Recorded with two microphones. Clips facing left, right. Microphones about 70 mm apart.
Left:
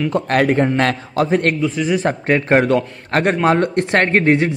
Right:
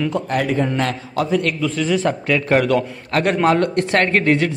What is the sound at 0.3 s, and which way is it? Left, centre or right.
A man's voice, left.